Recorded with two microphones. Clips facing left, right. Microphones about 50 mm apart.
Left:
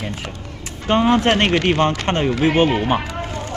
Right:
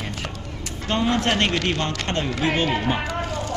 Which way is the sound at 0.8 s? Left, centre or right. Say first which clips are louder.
Left 6 dB; left.